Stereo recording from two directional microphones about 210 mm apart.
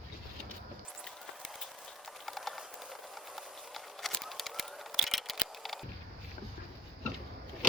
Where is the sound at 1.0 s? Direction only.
Centre (ahead or behind).